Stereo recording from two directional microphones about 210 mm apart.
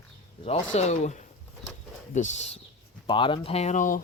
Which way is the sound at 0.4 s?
30° left (ahead or behind).